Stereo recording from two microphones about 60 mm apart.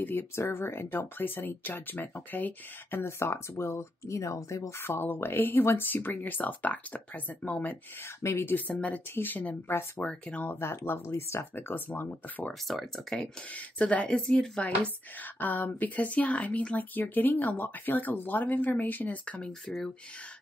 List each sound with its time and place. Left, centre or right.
0.0 s speech: left
4.8 s speech: left
8.2 s speech: left
8.5 s speech: left
10.9 s speech: left
12.6 s speech: centre
13.7 s speech: centre
14.1 s speech: centre
15.3 s speech: left